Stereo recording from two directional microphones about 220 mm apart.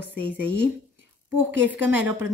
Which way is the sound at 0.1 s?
50° left (ahead or behind).